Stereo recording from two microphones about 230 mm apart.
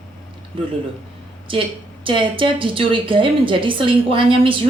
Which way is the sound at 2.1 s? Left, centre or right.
Right.